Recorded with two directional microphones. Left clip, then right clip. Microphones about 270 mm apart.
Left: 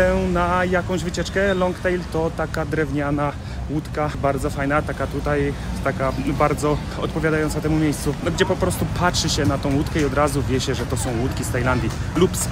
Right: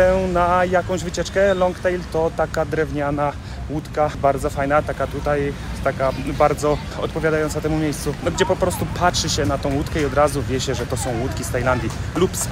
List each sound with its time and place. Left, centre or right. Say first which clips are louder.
0.0 s speech: right 3 dB; centre